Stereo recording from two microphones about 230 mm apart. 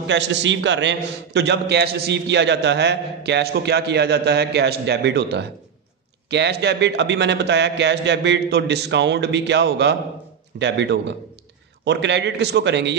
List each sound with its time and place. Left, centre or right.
0.0 s a man's voice: right